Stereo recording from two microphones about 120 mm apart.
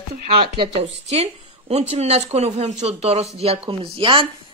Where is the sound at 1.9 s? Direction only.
60° right (ahead or behind).